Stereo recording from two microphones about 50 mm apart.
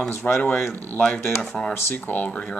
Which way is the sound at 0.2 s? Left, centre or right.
Left.